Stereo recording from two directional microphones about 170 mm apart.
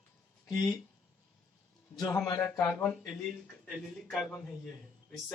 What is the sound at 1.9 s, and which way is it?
A man's voice, 20° left (ahead or behind).